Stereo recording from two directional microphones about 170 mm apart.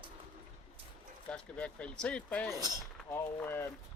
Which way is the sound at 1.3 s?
5° left (ahead or behind).